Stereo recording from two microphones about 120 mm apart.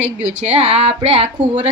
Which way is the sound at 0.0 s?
70° right (ahead or behind).